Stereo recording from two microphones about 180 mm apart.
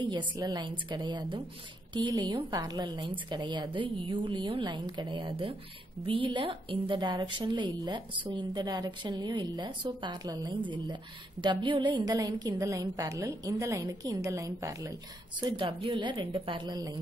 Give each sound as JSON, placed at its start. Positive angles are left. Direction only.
{"t": 0.4, "sound": "a woman's voice", "side_deg": -25}
{"t": 15.5, "sound": "a woman's voice", "side_deg": -30}